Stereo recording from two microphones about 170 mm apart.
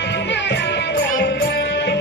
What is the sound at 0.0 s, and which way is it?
Music, 90° left.